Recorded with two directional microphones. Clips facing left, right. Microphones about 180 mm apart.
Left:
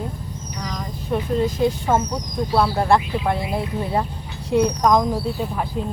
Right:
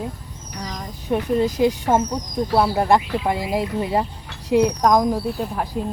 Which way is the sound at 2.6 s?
15° right (ahead or behind).